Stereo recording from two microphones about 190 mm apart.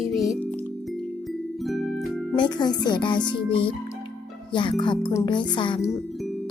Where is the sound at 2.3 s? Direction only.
25° left (ahead or behind).